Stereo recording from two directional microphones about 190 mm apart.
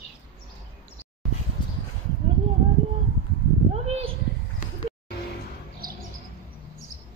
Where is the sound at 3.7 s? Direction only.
30° right (ahead or behind).